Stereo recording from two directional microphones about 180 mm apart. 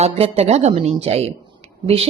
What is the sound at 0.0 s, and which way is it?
A woman's voice, 35° right (ahead or behind).